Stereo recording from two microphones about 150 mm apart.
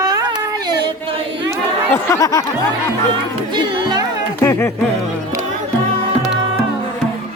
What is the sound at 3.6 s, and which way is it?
Music, 30° right (ahead or behind).